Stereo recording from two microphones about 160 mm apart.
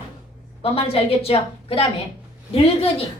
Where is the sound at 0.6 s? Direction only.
35° left (ahead or behind).